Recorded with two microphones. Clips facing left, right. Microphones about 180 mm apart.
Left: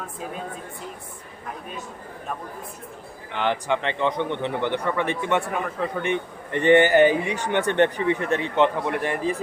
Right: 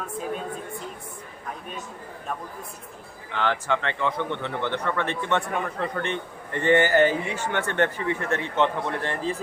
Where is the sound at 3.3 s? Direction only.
15° left (ahead or behind).